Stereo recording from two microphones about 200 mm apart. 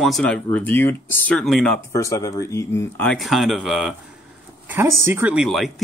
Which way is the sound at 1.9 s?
15° left (ahead or behind).